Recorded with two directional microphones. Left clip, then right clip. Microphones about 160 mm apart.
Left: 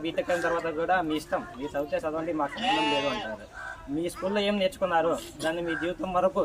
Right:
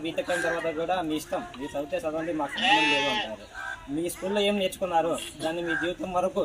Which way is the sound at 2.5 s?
90° left.